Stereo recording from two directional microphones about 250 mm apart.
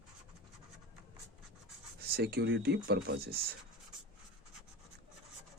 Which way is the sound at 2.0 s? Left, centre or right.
Right.